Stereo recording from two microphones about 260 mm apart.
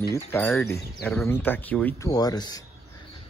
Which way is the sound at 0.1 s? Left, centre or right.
Centre.